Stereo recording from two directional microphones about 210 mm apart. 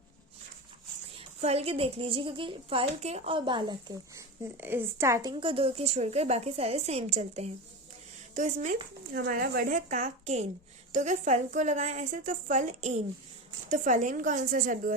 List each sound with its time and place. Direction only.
1.4 s a woman's voice: 30° right (ahead or behind)
9.1 s a woman's voice: 45° right (ahead or behind)